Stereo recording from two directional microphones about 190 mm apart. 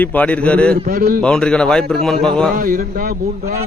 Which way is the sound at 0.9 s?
50° right (ahead or behind).